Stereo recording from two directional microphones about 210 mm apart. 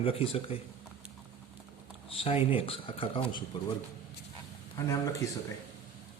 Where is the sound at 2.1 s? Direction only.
25° left (ahead or behind).